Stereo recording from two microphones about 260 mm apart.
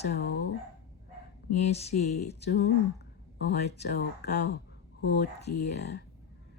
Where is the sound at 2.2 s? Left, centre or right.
Left.